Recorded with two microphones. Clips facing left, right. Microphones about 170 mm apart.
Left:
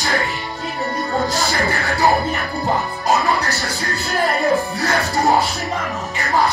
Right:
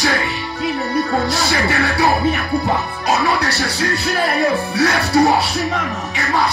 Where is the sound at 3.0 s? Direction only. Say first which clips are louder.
Right 1 dB; 70° right (ahead or behind).